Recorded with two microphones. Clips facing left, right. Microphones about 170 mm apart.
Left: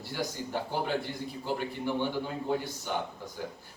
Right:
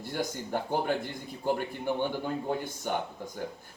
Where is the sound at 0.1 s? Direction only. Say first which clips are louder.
Right 2 dB; 50° right (ahead or behind).